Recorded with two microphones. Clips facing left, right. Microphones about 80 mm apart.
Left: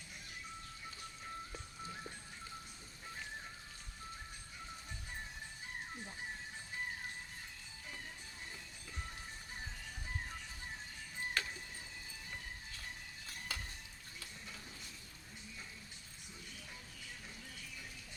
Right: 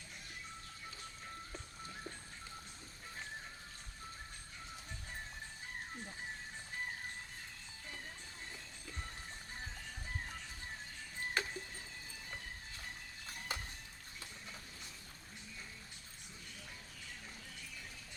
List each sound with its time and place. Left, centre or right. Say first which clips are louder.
11.4 s music: right 2 dB; right
13.5 s music: right 2 dB; right